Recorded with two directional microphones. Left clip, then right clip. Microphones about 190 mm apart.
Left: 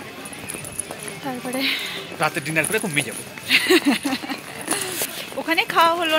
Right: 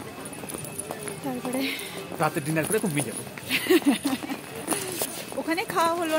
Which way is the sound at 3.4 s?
15° left (ahead or behind).